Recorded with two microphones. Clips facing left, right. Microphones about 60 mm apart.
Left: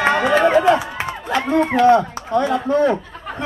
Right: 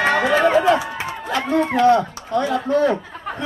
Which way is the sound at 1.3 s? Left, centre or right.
Left.